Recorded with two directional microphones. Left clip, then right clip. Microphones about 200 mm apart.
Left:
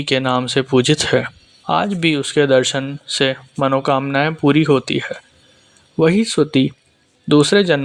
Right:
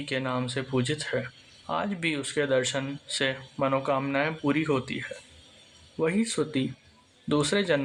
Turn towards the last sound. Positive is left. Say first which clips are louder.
# left 12 dB
turn(degrees=35)  # may be behind; listen again after turning